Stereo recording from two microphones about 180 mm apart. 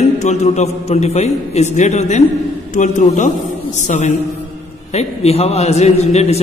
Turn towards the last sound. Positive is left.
turn(degrees=35)  # may be behind; listen again after turning